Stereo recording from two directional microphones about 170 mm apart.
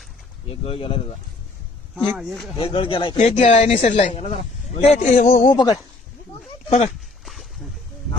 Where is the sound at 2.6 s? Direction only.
30° left (ahead or behind); by 5.5 s 45° left (ahead or behind).